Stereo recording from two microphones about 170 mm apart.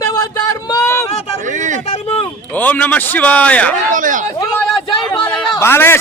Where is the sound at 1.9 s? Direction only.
35° left (ahead or behind).